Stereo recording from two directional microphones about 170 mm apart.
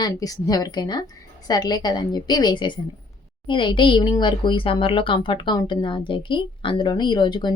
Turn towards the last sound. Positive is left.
turn(degrees=25)  # may be behind; listen again after turning